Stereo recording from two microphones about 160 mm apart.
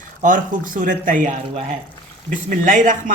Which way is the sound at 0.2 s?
55° right (ahead or behind).